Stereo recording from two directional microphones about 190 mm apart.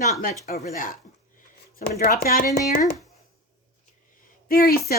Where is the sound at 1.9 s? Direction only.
50° left (ahead or behind).